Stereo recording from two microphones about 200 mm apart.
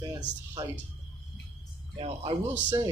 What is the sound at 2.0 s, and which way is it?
Speech, 30° right (ahead or behind).